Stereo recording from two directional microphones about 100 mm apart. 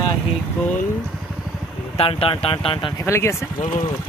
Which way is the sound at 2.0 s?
70° left (ahead or behind).